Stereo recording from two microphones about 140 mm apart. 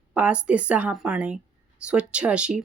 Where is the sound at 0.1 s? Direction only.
10° right (ahead or behind).